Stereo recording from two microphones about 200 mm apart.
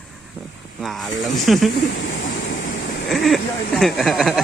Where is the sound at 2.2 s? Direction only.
40° left (ahead or behind).